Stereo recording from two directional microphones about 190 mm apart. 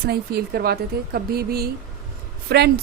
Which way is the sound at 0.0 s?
55° right (ahead or behind).